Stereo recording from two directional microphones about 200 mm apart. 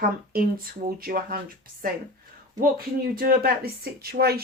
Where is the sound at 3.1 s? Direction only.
50° right (ahead or behind).